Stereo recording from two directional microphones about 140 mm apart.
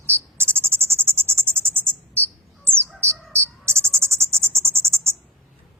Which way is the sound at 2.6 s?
15° right (ahead or behind).